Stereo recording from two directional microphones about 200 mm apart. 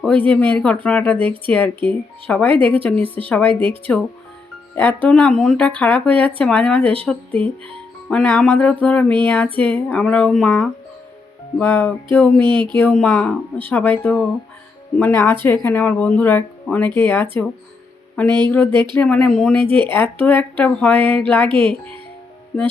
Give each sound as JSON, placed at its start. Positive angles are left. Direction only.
{"t": 0.0, "sound": "speech", "side_deg": 10}
{"t": 2.5, "sound": "speech", "side_deg": -25}
{"t": 2.7, "sound": "speech", "side_deg": 10}
{"t": 3.5, "sound": "speech", "side_deg": -25}
{"t": 4.7, "sound": "speech", "side_deg": 10}
{"t": 12.5, "sound": "speech", "side_deg": -25}
{"t": 12.8, "sound": "speech", "side_deg": 5}
{"t": 18.4, "sound": "speech", "side_deg": 10}
{"t": 18.7, "sound": "speech", "side_deg": -25}
{"t": 18.9, "sound": "speech", "side_deg": 5}
{"t": 21.5, "sound": "speech", "side_deg": -25}